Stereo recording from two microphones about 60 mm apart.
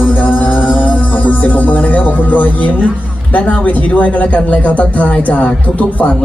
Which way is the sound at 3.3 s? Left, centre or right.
Left.